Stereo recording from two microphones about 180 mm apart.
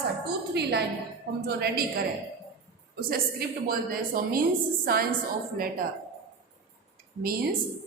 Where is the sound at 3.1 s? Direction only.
55° right (ahead or behind).